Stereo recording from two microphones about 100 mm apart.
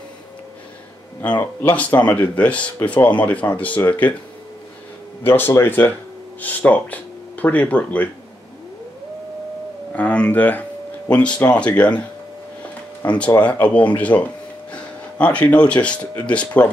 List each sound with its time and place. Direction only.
1.4 s speech: 15° left (ahead or behind)
5.2 s speech: 20° left (ahead or behind)
9.9 s speech: 10° left (ahead or behind)
13.0 s speech: 15° left (ahead or behind)